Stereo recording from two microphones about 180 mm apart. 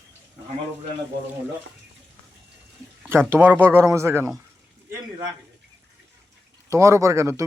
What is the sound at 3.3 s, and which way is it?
Speech, 10° right (ahead or behind).